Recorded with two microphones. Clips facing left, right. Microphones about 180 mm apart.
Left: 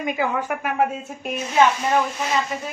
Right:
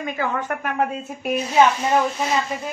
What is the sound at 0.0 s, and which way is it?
Speech, 15° left (ahead or behind).